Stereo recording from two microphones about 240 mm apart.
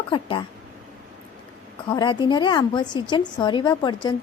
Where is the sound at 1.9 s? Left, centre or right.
Centre.